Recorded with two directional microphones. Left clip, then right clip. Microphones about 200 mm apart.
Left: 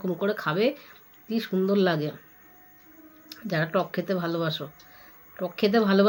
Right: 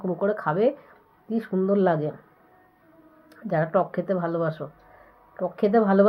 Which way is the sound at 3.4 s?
20° left (ahead or behind).